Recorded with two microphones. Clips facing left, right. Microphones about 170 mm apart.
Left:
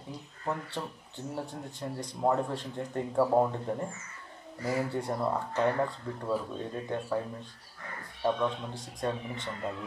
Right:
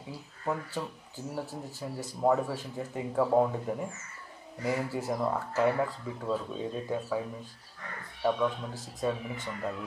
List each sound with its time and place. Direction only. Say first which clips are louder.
0.1 s speech: right 1 dB; 5° right (ahead or behind)